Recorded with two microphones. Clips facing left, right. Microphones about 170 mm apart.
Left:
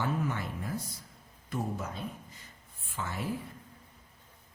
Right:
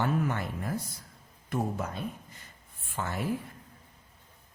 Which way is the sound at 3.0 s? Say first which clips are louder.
Right 3 dB; 50° right (ahead or behind).